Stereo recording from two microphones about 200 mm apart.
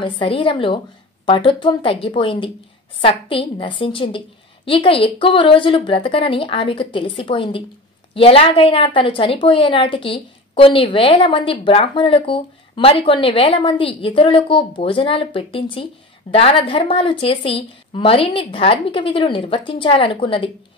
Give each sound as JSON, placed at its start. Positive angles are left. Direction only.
{"t": 0.0, "sound": "a woman's voice", "side_deg": 25}